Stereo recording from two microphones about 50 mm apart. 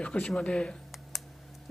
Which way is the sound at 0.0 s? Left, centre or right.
Left.